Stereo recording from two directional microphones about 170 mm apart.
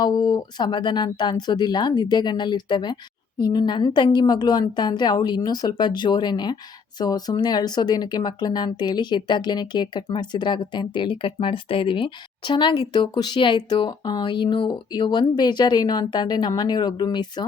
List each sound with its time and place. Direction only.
0.0 s speech: 25° left (ahead or behind)